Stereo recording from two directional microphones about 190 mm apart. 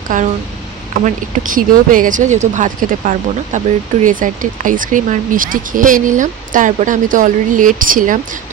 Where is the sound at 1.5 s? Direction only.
45° right (ahead or behind).